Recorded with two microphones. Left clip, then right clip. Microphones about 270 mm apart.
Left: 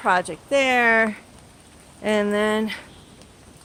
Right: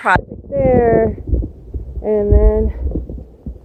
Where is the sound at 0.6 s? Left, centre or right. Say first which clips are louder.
Right 5 dB; centre.